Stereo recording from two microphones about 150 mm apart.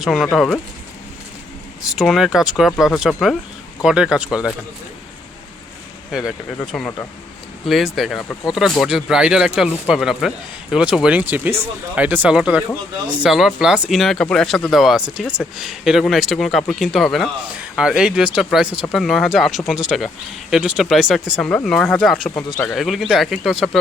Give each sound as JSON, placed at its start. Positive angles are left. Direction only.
{"t": 0.0, "sound": "speech", "side_deg": -5}
{"t": 0.3, "sound": "speech", "side_deg": 10}
{"t": 2.0, "sound": "speech", "side_deg": 0}
{"t": 6.1, "sound": "speech", "side_deg": -5}
{"t": 7.9, "sound": "speech", "side_deg": 0}
{"t": 22.4, "sound": "speech", "side_deg": 30}
{"t": 22.6, "sound": "speech", "side_deg": 0}